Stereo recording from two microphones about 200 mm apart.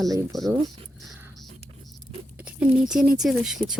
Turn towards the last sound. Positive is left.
turn(degrees=0)  # may be behind; listen again after turning